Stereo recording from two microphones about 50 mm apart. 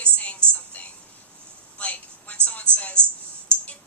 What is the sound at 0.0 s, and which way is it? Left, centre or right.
Music, left.